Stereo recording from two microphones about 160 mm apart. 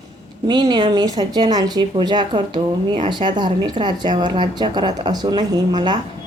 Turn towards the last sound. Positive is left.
turn(degrees=-25)  # may be behind; listen again after turning